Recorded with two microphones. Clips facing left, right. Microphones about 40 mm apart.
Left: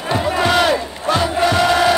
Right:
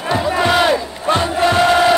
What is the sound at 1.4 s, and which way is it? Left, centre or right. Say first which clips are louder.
Chant: right 3 dB; right.